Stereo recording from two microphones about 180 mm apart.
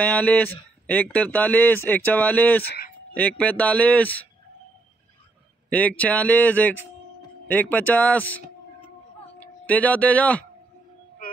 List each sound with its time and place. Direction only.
0.0 s speech: 10° left (ahead or behind)
2.6 s speech: 60° left (ahead or behind)
3.2 s speech: 10° left (ahead or behind)
5.7 s speech: 10° left (ahead or behind)